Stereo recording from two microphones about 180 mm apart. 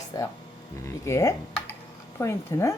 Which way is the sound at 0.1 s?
20° left (ahead or behind).